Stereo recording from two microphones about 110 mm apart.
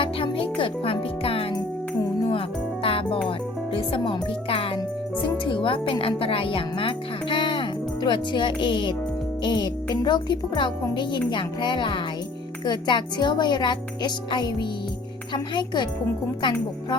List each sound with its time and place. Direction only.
0.0 s music: 50° left (ahead or behind)
2.8 s music: 55° left (ahead or behind)
3.2 s speech: 55° left (ahead or behind)